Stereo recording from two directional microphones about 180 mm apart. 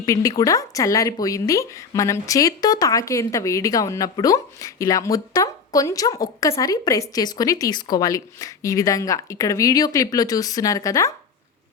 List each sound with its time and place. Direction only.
0.0 s speech: 20° left (ahead or behind)